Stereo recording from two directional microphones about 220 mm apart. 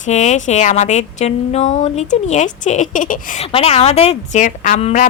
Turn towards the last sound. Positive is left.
turn(degrees=35)  # may be behind; listen again after turning